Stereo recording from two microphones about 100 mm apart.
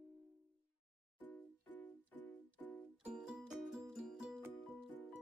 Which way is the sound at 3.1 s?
5° right (ahead or behind).